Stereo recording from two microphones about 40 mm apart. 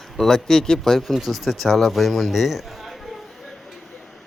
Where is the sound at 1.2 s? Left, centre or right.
Centre.